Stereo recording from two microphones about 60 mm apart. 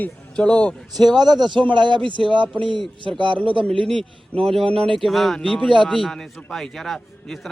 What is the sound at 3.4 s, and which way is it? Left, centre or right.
Speech, centre.